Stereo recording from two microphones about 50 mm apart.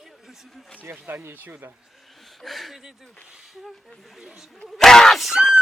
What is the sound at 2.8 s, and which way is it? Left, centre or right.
Speech, centre.